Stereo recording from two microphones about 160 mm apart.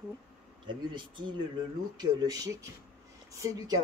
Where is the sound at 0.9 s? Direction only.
30° right (ahead or behind).